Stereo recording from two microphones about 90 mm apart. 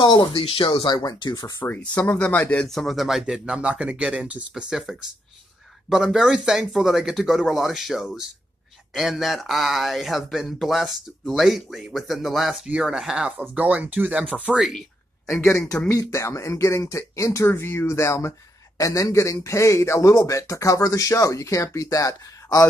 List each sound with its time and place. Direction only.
0.0 s speech: 55° left (ahead or behind)
0.4 s speech: 80° left; by 1.6 s 50° left (ahead or behind)
1.6 s speech: 20° left (ahead or behind)
2.6 s speech: 5° left (ahead or behind)
13.4 s speech: 15° right (ahead or behind)
15.6 s speech: 10° left (ahead or behind)
16.0 s speech: 35° left (ahead or behind)